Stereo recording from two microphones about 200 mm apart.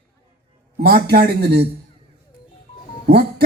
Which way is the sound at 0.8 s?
50° right (ahead or behind).